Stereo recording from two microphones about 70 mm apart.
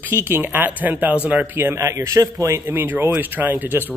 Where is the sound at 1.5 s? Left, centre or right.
Right.